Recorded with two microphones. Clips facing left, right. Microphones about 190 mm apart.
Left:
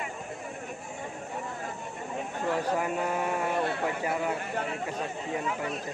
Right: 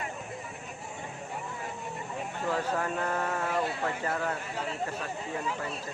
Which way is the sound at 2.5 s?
15° left (ahead or behind).